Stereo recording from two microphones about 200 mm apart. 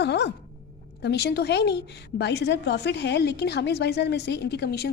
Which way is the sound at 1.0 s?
55° left (ahead or behind).